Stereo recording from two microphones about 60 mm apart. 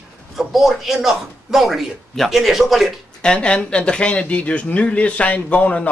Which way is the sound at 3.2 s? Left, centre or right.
Centre.